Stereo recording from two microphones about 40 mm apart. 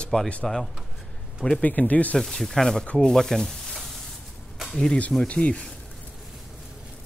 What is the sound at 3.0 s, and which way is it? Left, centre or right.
Rub, centre.